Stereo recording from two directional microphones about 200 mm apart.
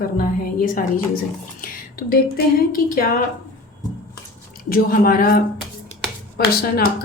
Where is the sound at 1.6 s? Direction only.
45° left (ahead or behind).